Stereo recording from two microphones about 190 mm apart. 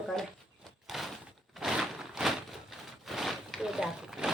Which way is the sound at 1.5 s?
Centre (ahead or behind).